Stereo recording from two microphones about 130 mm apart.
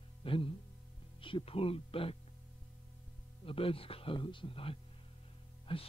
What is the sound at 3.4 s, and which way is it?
Speech, 45° left (ahead or behind).